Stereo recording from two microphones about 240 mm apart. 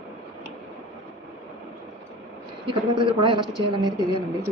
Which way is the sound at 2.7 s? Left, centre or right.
Right.